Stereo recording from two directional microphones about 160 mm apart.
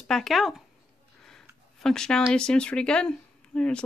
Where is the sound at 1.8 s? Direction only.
5° left (ahead or behind).